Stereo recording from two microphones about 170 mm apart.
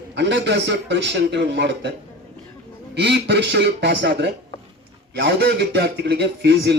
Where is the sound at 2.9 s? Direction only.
85° right.